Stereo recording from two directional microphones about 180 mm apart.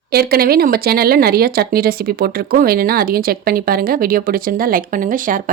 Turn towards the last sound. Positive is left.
turn(degrees=-50)  # may be behind; listen again after turning